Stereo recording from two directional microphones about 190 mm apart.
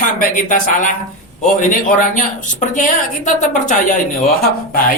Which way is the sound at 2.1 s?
40° left (ahead or behind).